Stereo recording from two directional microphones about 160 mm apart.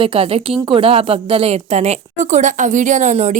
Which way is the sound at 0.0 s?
35° right (ahead or behind).